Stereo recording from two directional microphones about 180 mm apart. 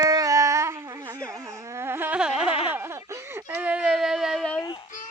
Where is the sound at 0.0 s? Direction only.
20° right (ahead or behind).